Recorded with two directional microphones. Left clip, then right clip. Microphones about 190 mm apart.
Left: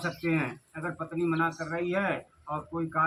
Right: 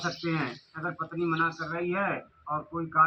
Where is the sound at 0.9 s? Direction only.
10° left (ahead or behind).